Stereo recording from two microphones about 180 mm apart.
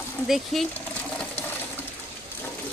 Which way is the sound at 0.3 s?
Centre (ahead or behind).